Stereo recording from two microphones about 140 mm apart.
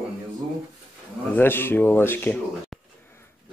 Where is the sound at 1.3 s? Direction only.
15° left (ahead or behind).